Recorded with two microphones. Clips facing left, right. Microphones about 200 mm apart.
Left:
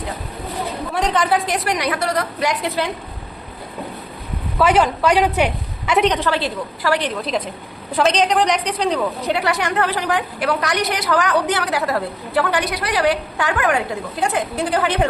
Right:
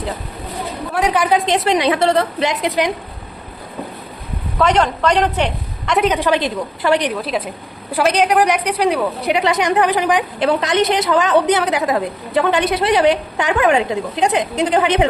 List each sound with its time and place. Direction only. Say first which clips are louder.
0.9 s a woman's voice: right 3 dB; 10° right (ahead or behind)
1.3 s a woman's voice: right 4 dB; 25° right (ahead or behind)
4.5 s a woman's voice: even; 5° left (ahead or behind)
6.1 s a woman's voice: right 3 dB; 15° right (ahead or behind)
7.1 s a woman's voice: right 1 dB; 5° right (ahead or behind)